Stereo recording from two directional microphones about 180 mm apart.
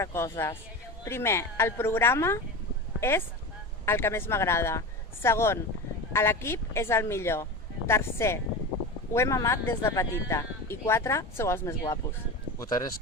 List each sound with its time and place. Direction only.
0.0 s speech: 15° left (ahead or behind)